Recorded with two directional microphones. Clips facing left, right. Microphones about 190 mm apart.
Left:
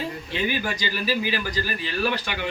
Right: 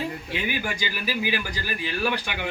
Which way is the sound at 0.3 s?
10° right (ahead or behind).